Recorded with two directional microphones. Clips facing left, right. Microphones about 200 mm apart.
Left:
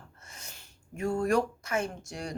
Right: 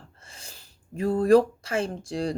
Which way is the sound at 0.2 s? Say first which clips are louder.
Right 1 dB; 30° right (ahead or behind).